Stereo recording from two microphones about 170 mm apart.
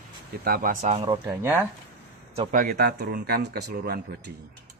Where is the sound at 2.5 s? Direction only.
55° right (ahead or behind); by 4.3 s 70° right (ahead or behind).